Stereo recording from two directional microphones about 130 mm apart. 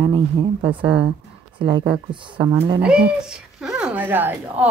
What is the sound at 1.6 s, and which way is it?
Speech, 40° right (ahead or behind).